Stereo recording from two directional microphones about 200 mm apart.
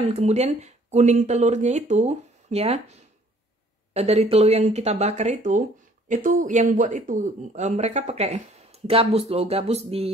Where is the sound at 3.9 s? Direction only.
30° right (ahead or behind).